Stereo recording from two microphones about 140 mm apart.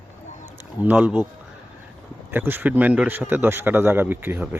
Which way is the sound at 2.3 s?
15° right (ahead or behind).